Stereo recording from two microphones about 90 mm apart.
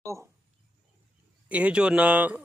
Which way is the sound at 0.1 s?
35° right (ahead or behind).